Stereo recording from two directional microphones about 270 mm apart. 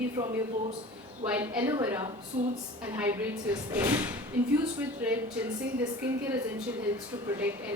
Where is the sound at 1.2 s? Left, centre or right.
Centre.